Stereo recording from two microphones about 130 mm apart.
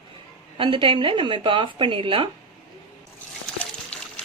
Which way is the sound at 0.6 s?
40° right (ahead or behind).